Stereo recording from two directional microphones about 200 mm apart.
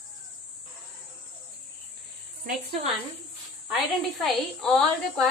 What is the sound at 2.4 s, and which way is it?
Speech, 45° right (ahead or behind).